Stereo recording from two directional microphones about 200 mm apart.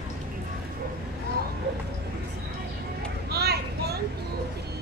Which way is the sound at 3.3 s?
55° right (ahead or behind).